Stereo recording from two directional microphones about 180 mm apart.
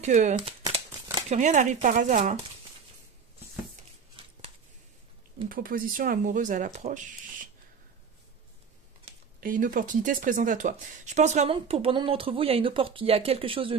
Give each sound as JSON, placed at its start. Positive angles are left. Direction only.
{"t": 0.0, "sound": "speech", "side_deg": -40}
{"t": 0.5, "sound": "crumpling", "side_deg": -30}
{"t": 1.3, "sound": "speech", "side_deg": -40}
{"t": 5.5, "sound": "speech", "side_deg": -50}
{"t": 9.4, "sound": "speech", "side_deg": -50}